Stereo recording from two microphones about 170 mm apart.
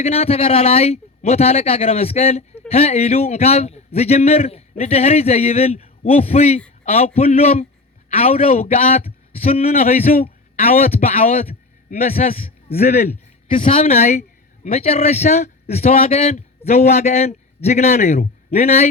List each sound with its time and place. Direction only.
0.0 s speech: 35° left (ahead or behind)
11.9 s a man's voice: 55° left (ahead or behind)
13.5 s speech: 30° left (ahead or behind)